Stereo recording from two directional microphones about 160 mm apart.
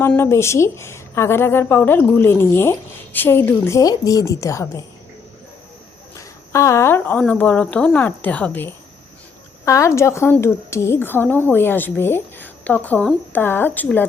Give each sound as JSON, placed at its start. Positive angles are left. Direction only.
{"t": 0.0, "sound": "speech", "side_deg": 15}
{"t": 6.1, "sound": "speech", "side_deg": 20}